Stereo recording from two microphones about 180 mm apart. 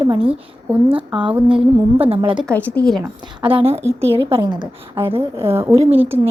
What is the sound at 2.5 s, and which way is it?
Speech, 10° left (ahead or behind).